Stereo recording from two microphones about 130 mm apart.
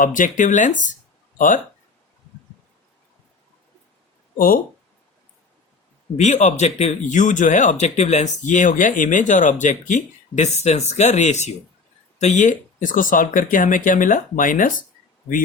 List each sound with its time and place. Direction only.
0.0 s speech: 90° left
1.4 s speech: 90° left
4.4 s speech: 90° left
6.1 s speech: 60° left (ahead or behind); by 14.8 s 90° left